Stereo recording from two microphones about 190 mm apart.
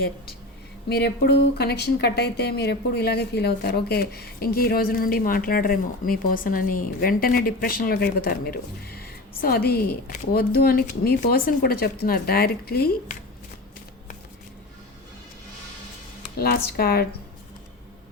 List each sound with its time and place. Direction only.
0.9 s a woman's voice: 55° left (ahead or behind)
16.4 s a woman's voice: 55° left (ahead or behind)